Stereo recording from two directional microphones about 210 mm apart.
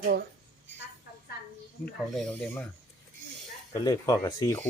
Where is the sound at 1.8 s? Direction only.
Centre (ahead or behind).